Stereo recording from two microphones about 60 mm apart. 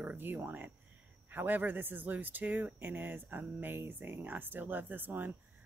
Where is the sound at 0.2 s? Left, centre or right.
Right.